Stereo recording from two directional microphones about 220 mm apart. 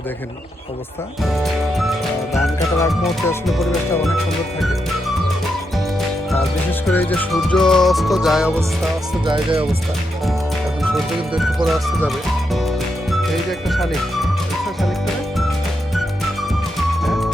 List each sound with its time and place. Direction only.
2.7 s music: 15° left (ahead or behind)
3.6 s music: centre (ahead or behind)
6.8 s music: 5° left (ahead or behind)
9.2 s speech: 25° right (ahead or behind)
10.9 s music: centre (ahead or behind)
17.0 s music: centre (ahead or behind)